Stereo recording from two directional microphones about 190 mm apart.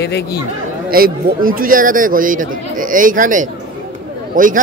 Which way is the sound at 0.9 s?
50° right (ahead or behind).